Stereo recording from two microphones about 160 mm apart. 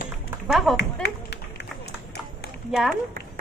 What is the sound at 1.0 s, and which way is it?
Run, 90° left.